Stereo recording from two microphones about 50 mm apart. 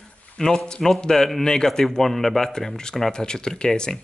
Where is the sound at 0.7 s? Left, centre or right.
Centre.